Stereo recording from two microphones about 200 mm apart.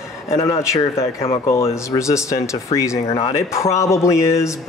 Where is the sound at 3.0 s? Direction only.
30° left (ahead or behind).